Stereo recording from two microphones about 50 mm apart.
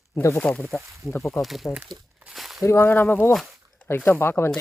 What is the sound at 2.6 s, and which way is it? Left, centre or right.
Speech, left.